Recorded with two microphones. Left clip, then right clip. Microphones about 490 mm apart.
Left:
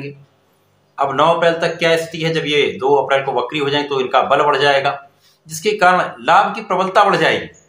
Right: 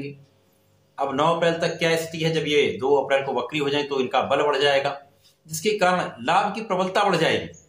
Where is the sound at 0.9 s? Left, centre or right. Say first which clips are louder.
Left 8 dB; right.